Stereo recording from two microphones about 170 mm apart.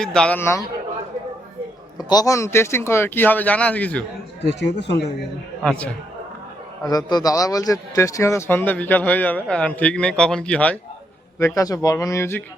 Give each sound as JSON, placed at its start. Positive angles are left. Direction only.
{"t": 0.0, "sound": "a man's voice", "side_deg": 5}
{"t": 2.0, "sound": "a man's voice", "side_deg": 25}
{"t": 4.4, "sound": "speech", "side_deg": 90}
{"t": 5.6, "sound": "a man's voice", "side_deg": 10}
{"t": 6.8, "sound": "a man's voice", "side_deg": 20}
{"t": 11.3, "sound": "a man's voice", "side_deg": 20}